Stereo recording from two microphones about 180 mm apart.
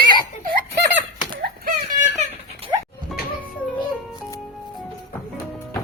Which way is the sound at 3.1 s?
Centre (ahead or behind).